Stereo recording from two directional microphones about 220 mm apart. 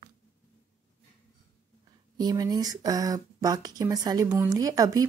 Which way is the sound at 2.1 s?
20° right (ahead or behind).